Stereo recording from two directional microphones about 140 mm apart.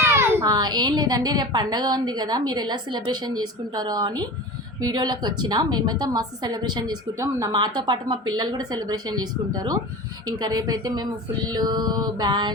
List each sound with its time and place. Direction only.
0.0 s a child's voice: 20° right (ahead or behind)